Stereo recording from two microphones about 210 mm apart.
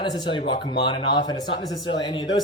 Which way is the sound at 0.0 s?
20° left (ahead or behind).